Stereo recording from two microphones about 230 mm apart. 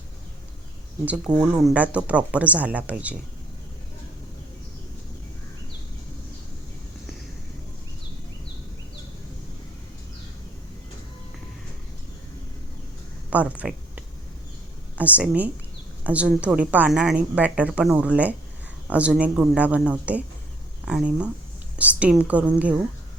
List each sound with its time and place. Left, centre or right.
1.4 s speech: centre
13.3 s a woman's voice: centre